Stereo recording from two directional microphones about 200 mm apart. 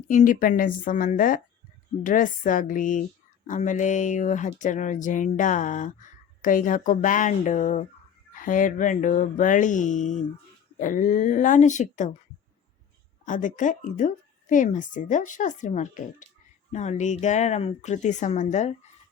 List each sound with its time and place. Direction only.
0.1 s a woman's voice: 40° left (ahead or behind)
13.2 s speech: 40° left (ahead or behind)